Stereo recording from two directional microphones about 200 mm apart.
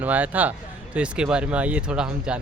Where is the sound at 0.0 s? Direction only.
10° right (ahead or behind).